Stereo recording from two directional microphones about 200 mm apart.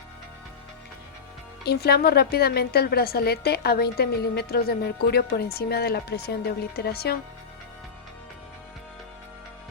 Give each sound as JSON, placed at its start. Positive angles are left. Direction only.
{"t": 1.6, "sound": "a woman's voice", "side_deg": 55}